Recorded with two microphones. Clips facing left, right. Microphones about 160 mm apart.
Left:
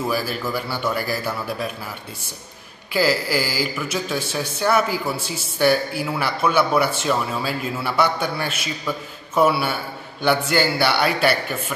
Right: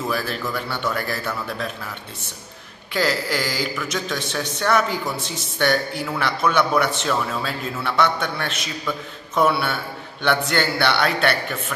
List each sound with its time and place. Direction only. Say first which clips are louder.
0.0 s a man's voice: left 1 dB; 5° left (ahead or behind)
2.9 s a man's voice: left 2 dB; 5° left (ahead or behind)